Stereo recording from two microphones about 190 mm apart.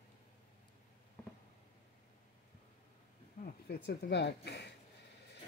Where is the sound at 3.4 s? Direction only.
60° left (ahead or behind).